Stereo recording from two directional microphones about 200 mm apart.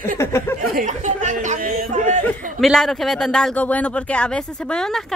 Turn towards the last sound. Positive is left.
turn(degrees=5)  # may be behind; listen again after turning